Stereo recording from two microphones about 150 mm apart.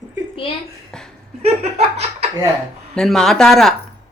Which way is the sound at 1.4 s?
45° right (ahead or behind).